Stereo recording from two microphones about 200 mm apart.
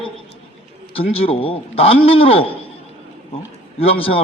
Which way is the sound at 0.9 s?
30° left (ahead or behind).